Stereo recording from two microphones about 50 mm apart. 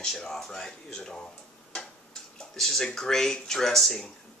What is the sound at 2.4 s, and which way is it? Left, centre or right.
Speech, centre.